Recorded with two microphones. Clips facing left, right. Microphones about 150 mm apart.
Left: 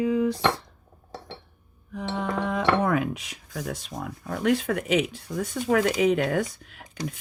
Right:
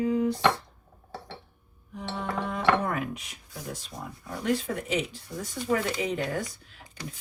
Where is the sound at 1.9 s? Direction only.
90° left.